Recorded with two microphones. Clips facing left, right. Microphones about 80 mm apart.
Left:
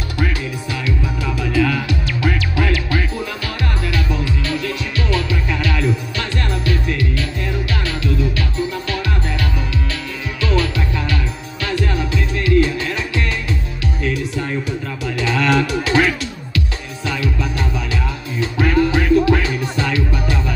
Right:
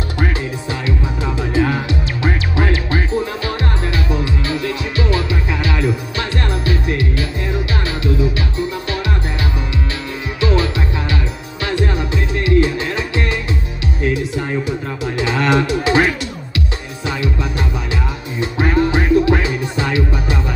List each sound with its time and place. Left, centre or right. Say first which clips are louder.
0.2 s music: even; right
10.4 s music: right 2 dB; right
15.1 s a sound: right 1 dB; right
17.0 s music: right 1 dB; right